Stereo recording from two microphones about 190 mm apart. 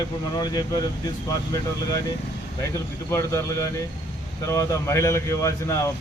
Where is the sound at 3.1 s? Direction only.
15° left (ahead or behind).